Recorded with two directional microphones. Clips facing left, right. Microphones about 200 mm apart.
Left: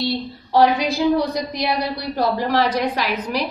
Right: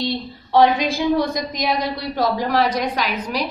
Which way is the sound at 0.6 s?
Centre (ahead or behind).